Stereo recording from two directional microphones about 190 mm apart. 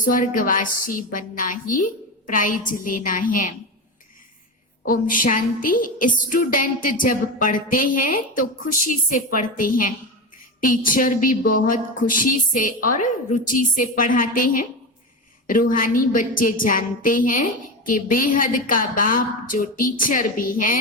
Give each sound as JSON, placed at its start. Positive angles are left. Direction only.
{"t": 0.0, "sound": "a woman's voice", "side_deg": 45}
{"t": 4.9, "sound": "a woman's voice", "side_deg": 45}